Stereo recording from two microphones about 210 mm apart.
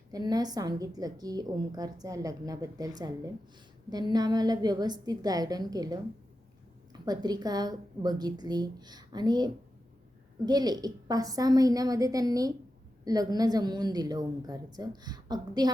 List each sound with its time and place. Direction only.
0.1 s a woman's voice: 20° right (ahead or behind)
7.0 s a woman's voice: 20° right (ahead or behind)